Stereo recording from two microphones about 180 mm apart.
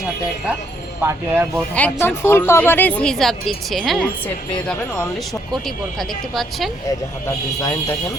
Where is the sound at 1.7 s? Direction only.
10° left (ahead or behind).